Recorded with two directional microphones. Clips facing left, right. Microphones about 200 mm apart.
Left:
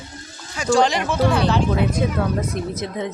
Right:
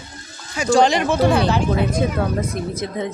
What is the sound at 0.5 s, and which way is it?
Speech, 15° right (ahead or behind).